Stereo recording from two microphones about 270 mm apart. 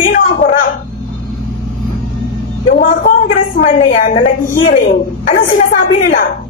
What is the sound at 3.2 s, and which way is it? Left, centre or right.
Speech, left.